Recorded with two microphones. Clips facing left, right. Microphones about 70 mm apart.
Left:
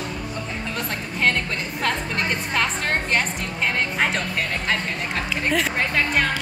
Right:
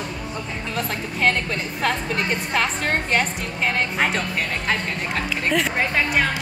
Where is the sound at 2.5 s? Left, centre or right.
Centre.